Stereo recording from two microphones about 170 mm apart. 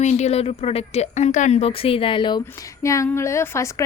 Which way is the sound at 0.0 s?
40° left (ahead or behind).